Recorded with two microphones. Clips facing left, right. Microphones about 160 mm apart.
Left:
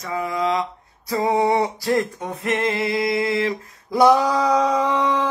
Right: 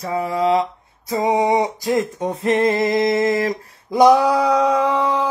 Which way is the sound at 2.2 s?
25° right (ahead or behind).